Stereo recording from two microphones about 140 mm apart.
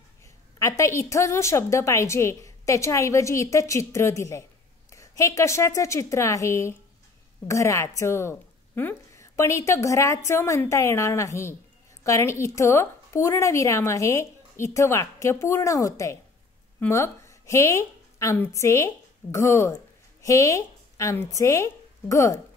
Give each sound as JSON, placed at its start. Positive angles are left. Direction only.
{"t": 0.6, "sound": "a woman's voice", "side_deg": 20}